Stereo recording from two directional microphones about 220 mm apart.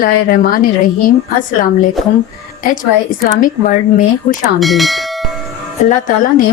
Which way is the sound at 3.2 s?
40° left (ahead or behind).